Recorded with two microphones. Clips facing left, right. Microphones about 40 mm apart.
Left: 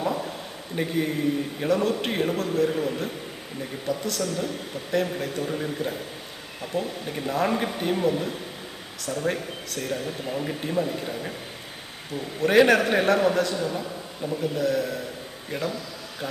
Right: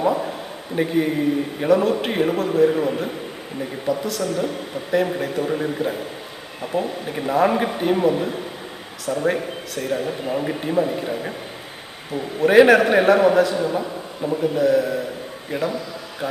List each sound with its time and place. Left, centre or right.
0.0 s a sound: centre
0.8 s speech: centre
12.4 s speech: centre
13.7 s a man's voice: right
14.4 s speech: centre